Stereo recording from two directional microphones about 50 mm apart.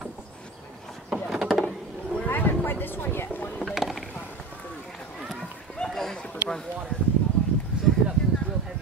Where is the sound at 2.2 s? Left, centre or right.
Left.